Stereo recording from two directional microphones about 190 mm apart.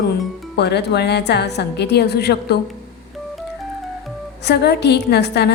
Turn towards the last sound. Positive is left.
turn(degrees=60)  # may be behind; listen again after turning